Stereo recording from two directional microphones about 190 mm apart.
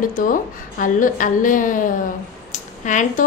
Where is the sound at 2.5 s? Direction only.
40° left (ahead or behind).